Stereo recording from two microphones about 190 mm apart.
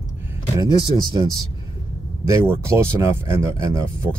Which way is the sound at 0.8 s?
20° right (ahead or behind).